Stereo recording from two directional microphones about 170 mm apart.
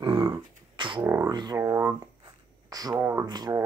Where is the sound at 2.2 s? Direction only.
20° right (ahead or behind).